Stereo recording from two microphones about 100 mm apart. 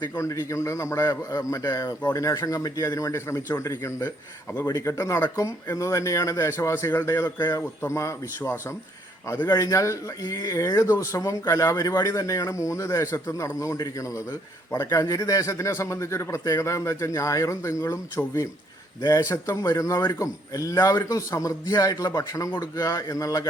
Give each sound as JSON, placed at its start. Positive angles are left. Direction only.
{"t": 0.2, "sound": "a man's voice", "side_deg": 30}
{"t": 4.5, "sound": "a man's voice", "side_deg": 30}
{"t": 7.3, "sound": "a man's voice", "side_deg": 45}
{"t": 7.9, "sound": "a man's voice", "side_deg": 30}